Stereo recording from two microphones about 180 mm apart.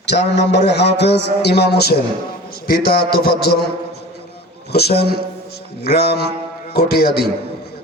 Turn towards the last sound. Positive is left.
turn(degrees=65)  # may be behind; listen again after turning